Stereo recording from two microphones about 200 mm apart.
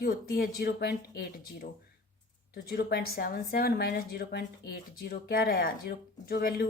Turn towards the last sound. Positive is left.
turn(degrees=50)  # may be behind; listen again after turning